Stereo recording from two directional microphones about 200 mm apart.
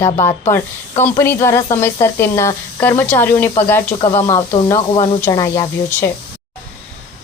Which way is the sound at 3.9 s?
25° left (ahead or behind).